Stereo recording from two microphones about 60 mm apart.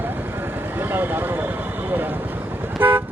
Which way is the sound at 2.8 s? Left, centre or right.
Right.